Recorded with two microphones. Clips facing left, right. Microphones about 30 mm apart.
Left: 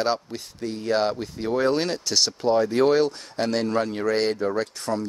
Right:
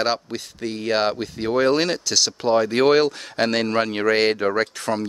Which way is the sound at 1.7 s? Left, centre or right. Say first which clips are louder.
Right 3 dB; right.